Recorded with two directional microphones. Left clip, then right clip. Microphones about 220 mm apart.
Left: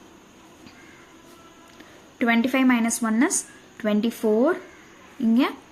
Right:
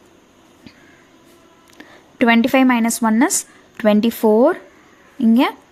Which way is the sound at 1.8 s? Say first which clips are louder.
Right 9 dB; 35° right (ahead or behind).